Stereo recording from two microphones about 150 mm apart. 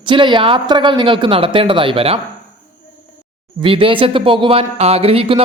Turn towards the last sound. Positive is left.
turn(degrees=-40)  # may be behind; listen again after turning